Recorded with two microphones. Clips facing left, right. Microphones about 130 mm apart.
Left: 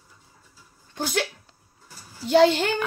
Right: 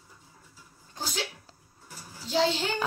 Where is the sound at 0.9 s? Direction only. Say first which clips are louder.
Left 9 dB; 65° left (ahead or behind).